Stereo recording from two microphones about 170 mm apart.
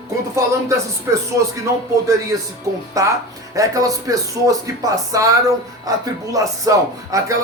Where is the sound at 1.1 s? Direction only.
20° right (ahead or behind).